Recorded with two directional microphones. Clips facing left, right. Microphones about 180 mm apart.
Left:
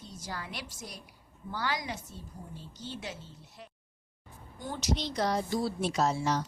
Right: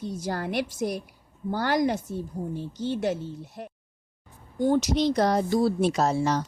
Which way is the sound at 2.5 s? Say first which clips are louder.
Right 13 dB; 65° right (ahead or behind).